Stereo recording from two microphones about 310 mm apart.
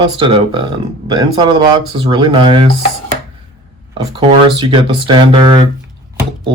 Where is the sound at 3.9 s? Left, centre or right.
Centre.